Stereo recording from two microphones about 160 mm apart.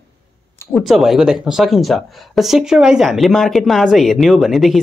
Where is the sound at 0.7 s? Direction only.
Centre (ahead or behind).